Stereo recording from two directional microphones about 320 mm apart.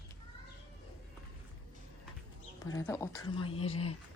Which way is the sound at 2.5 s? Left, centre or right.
Centre.